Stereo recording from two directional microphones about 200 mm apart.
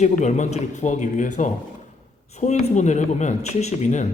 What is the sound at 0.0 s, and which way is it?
A woman's voice, 35° left (ahead or behind).